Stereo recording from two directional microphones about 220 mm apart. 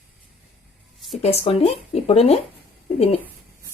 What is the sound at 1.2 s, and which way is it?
Speech, 25° left (ahead or behind).